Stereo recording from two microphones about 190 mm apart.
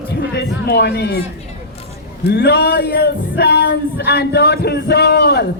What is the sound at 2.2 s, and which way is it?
Music, 60° left (ahead or behind).